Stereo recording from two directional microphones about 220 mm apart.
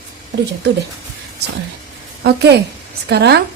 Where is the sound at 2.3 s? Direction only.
50° right (ahead or behind).